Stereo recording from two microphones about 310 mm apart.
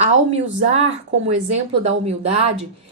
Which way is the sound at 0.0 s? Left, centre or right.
Centre.